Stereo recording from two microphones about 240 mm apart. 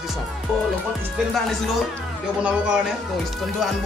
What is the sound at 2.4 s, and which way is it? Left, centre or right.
Speech, centre.